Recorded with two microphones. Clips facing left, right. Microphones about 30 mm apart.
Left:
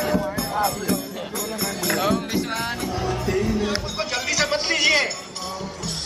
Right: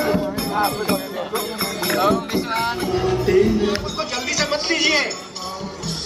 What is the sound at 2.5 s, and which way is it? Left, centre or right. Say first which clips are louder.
Music: right 5 dB; centre.